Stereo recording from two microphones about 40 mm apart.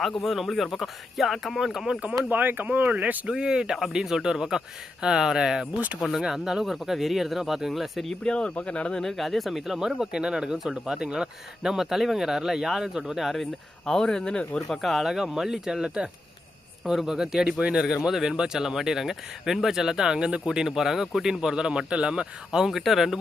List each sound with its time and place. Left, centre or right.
0.0 s speech: centre
2.3 s speech: right
3.3 s speech: centre
8.2 s speech: left
9.0 s speech: centre
13.2 s speech: centre; by 14.6 s left
14.8 s speech: centre
16.8 s speech: centre; by 22.6 s right
22.6 s speech: centre